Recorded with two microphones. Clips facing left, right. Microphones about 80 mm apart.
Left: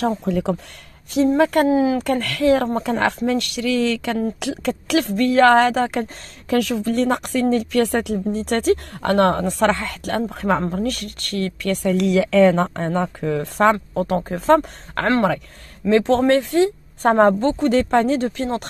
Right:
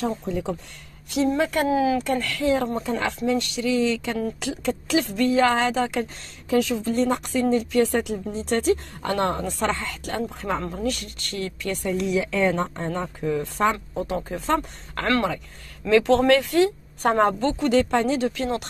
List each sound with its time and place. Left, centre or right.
0.2 s a woman's voice: left
1.4 s speech: left
1.7 s speech: left
2.0 s a woman's voice: left
6.5 s a woman's voice: left
15.9 s speech: left